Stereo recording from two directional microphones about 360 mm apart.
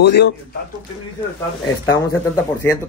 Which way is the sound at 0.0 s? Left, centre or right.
Left.